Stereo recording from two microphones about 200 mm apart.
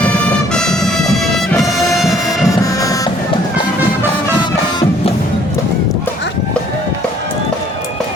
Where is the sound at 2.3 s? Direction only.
15° left (ahead or behind).